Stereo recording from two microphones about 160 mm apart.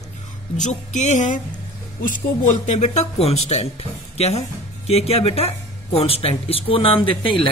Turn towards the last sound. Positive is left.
turn(degrees=35)  # may be behind; listen again after turning